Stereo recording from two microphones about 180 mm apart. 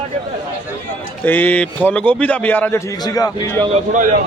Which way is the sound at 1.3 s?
10° left (ahead or behind).